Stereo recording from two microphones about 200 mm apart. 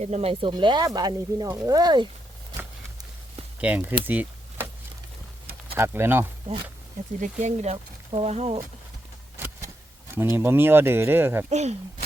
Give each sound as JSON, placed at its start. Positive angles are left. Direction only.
{"t": 0.0, "sound": "speech", "side_deg": -30}
{"t": 3.6, "sound": "speech", "side_deg": -10}
{"t": 4.0, "sound": "a sound", "side_deg": -10}
{"t": 5.7, "sound": "speech", "side_deg": -10}
{"t": 7.2, "sound": "speech", "side_deg": -35}
{"t": 10.3, "sound": "speech", "side_deg": -10}
{"t": 11.4, "sound": "speech", "side_deg": -35}